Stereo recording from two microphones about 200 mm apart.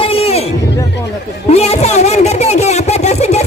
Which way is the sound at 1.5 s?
30° left (ahead or behind).